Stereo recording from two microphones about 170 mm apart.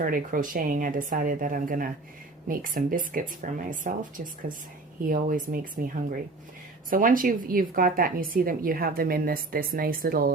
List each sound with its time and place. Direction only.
0.0 s speech: 55° right (ahead or behind)
5.0 s a woman's voice: 55° right (ahead or behind)